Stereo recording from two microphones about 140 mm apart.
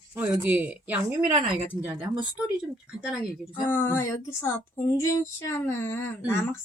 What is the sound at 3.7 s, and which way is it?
Speech, 15° left (ahead or behind).